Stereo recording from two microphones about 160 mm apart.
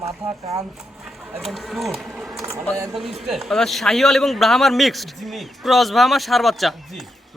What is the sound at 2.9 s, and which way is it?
A man's voice, centre (ahead or behind).